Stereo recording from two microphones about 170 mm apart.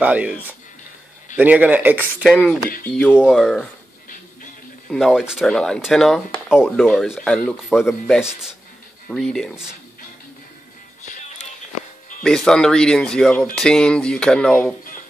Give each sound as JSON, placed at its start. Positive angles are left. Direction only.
{"t": 0.0, "sound": "speech", "side_deg": -10}
{"t": 2.9, "sound": "speech", "side_deg": 10}
{"t": 3.2, "sound": "speech", "side_deg": -5}
{"t": 4.9, "sound": "speech", "side_deg": 0}
{"t": 11.1, "sound": "music", "side_deg": 45}
{"t": 12.2, "sound": "speech", "side_deg": 5}